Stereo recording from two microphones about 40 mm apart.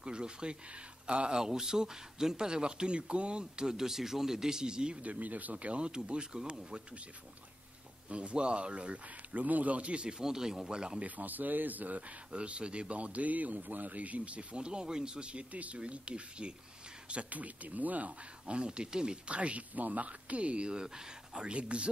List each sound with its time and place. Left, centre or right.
0.0 s speech: right
1.4 s speech: centre
5.0 s speech: right
8.1 s speech: right
9.3 s speech: right; by 11.0 s centre
11.0 s speech: right
12.3 s speech: right
18.4 s speech: right
20.8 s speech: centre
21.5 s speech: right